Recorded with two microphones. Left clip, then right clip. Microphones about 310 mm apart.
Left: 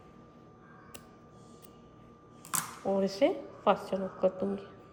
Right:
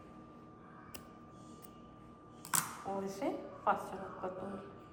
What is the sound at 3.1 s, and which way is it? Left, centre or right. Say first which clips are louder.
A woman's voice: left 10 dB; centre.